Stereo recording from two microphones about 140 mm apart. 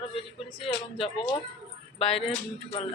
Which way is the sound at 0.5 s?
40° left (ahead or behind).